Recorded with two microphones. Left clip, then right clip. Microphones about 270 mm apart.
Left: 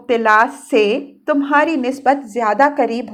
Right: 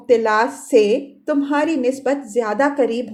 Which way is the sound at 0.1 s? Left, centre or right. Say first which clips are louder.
Left 3 dB; centre.